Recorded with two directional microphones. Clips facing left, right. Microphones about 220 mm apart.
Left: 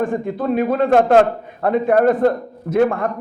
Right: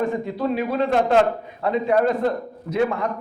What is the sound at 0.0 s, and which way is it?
A man's voice, 50° left (ahead or behind).